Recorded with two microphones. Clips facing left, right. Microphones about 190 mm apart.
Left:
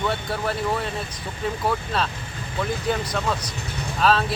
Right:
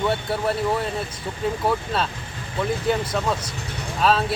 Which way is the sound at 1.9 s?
5° right (ahead or behind).